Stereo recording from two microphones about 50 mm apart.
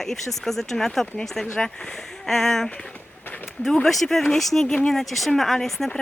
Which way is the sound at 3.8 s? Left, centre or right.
Centre.